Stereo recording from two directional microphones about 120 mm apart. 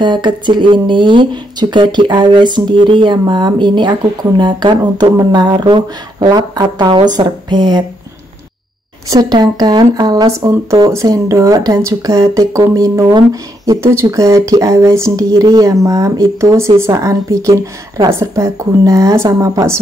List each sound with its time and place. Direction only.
0.0 s speech: 40° right (ahead or behind)
9.1 s speech: 35° right (ahead or behind)
10.4 s speech: 25° right (ahead or behind)